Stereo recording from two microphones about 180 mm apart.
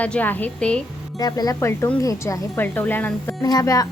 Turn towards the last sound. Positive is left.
turn(degrees=20)  # may be behind; listen again after turning